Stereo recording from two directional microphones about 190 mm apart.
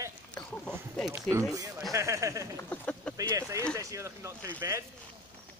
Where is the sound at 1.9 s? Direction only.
15° right (ahead or behind).